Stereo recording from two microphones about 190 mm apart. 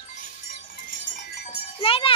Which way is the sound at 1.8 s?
30° left (ahead or behind).